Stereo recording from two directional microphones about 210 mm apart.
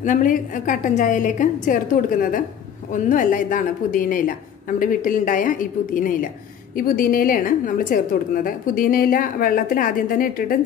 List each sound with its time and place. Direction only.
0.0 s a woman's voice: 40° left (ahead or behind)